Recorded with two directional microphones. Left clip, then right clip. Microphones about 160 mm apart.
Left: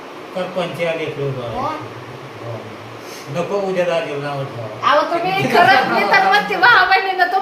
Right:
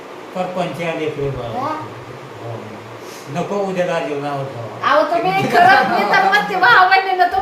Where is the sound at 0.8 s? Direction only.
10° right (ahead or behind).